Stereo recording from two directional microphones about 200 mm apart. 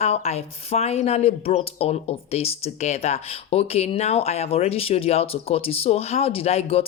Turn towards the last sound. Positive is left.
turn(degrees=30)  # may be behind; listen again after turning